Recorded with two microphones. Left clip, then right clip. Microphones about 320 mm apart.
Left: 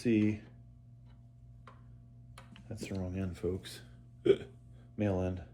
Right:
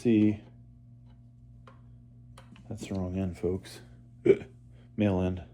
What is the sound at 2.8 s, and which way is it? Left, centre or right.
Speech, centre.